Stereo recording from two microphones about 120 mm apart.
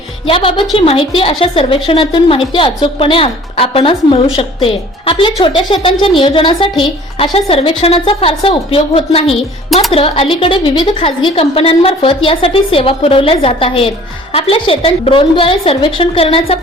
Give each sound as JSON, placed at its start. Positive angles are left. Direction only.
{"t": 0.3, "sound": "a woman's voice", "side_deg": 50}